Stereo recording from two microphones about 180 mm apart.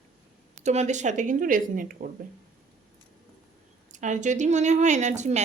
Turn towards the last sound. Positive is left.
turn(degrees=-40)  # may be behind; listen again after turning